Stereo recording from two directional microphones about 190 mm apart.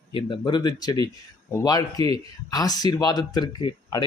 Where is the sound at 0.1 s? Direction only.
25° left (ahead or behind).